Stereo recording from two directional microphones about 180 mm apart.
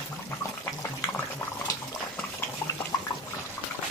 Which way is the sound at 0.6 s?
15° left (ahead or behind).